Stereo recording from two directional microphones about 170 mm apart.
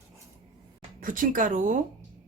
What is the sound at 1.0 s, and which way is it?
Speech, 55° right (ahead or behind).